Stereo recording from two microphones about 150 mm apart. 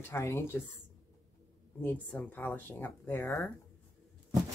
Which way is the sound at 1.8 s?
10° left (ahead or behind).